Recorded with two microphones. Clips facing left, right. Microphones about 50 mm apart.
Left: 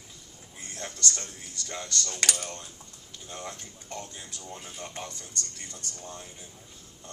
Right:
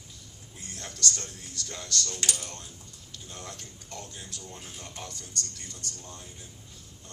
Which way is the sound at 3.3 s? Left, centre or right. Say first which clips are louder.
Left 4 dB; left.